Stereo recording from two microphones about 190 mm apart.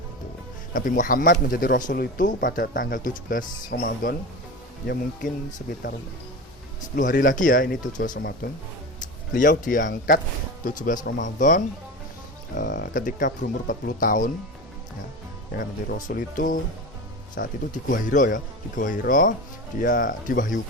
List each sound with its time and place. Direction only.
0.7 s speech: 45° left (ahead or behind)
4.9 s speech: 45° left (ahead or behind)
6.9 s speech: 45° left (ahead or behind)
15.5 s speech: 45° left (ahead or behind)